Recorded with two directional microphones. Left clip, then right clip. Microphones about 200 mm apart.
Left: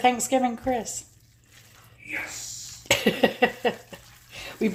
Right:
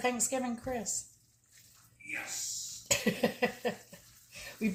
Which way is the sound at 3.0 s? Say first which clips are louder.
Left 10 dB; 50° left (ahead or behind).